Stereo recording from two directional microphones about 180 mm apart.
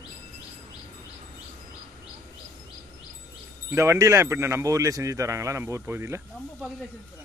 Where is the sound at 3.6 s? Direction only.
15° right (ahead or behind).